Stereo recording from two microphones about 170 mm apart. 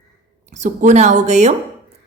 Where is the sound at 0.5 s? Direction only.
45° right (ahead or behind).